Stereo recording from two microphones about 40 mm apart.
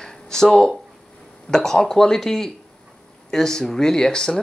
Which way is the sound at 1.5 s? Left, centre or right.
Centre.